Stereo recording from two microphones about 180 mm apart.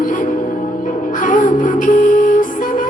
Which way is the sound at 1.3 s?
45° left (ahead or behind).